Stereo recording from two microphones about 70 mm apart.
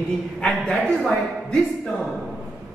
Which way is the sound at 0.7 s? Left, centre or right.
Centre.